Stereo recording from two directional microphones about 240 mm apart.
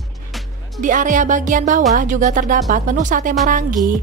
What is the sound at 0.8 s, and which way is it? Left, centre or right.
Speech, right.